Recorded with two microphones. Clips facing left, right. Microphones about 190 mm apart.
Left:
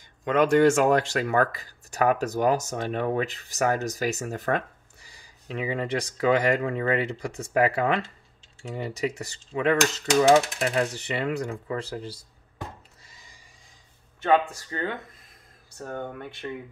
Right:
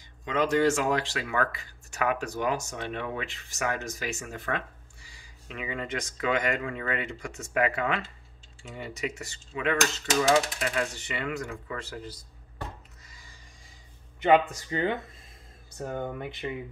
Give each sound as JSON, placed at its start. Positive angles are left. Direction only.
{"t": 0.2, "sound": "speech", "side_deg": 55}
{"t": 14.2, "sound": "speech", "side_deg": -20}